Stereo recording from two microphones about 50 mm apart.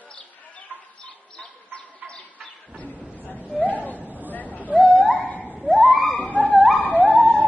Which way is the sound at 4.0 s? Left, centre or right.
Right.